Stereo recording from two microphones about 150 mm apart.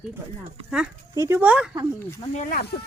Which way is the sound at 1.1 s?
20° right (ahead or behind).